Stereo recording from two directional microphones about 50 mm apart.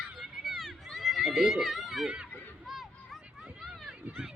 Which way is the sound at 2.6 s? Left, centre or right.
Centre.